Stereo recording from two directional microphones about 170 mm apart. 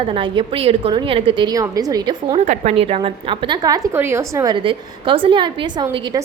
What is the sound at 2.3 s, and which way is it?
A woman's voice, 40° right (ahead or behind).